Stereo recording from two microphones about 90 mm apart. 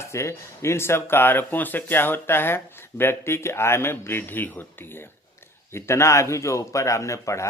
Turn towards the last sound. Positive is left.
turn(degrees=35)  # may be behind; listen again after turning